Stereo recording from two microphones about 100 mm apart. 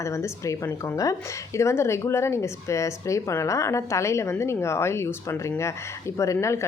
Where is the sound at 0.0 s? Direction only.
30° left (ahead or behind).